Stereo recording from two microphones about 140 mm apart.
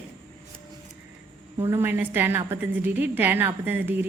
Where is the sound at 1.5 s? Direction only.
20° right (ahead or behind).